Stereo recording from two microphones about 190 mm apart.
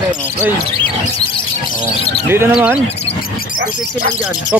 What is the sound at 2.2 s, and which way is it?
Speech, 10° right (ahead or behind).